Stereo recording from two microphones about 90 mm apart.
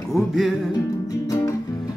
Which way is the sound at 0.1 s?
5° right (ahead or behind).